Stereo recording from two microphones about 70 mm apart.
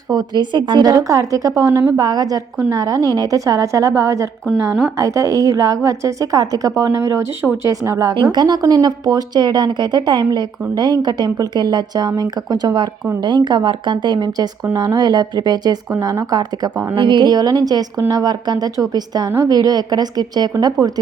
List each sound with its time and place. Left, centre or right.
0.1 s a woman's voice: right
8.2 s a woman's voice: right
8.7 s a woman's voice: right
13.2 s a woman's voice: right
17.2 s a woman's voice: right
19.4 s a woman's voice: right